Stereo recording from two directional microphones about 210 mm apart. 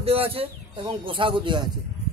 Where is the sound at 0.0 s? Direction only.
25° right (ahead or behind).